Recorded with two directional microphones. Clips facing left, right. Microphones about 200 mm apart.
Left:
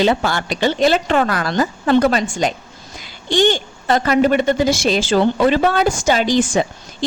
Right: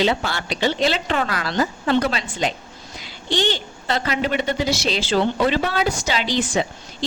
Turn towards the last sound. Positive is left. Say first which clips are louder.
# left 6 dB
turn(degrees=45)  # may be behind; listen again after turning